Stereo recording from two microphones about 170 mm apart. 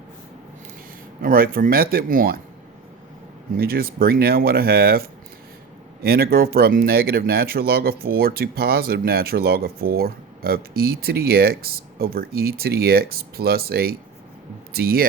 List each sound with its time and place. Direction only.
1.2 s speech: 60° right (ahead or behind)
3.6 s speech: 60° right (ahead or behind)